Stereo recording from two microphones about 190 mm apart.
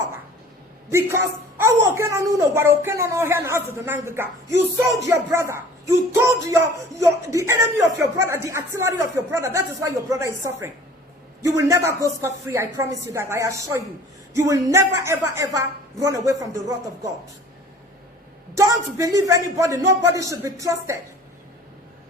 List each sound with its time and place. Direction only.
0.9 s speech: 15° right (ahead or behind)
18.5 s speech: 15° right (ahead or behind)